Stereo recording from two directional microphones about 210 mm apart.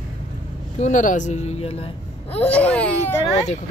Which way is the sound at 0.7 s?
35° left (ahead or behind).